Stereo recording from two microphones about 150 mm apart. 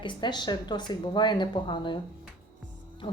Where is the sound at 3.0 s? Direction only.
40° left (ahead or behind).